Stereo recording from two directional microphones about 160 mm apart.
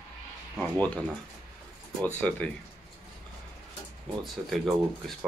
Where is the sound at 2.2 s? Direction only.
10° left (ahead or behind).